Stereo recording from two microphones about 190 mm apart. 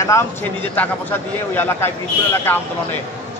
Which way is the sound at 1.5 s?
10° left (ahead or behind).